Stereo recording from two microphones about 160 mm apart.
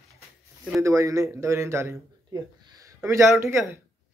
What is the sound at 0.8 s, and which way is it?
Speech, 20° right (ahead or behind).